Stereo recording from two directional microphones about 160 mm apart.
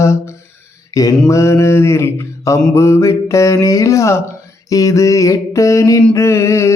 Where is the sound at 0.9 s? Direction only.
20° left (ahead or behind).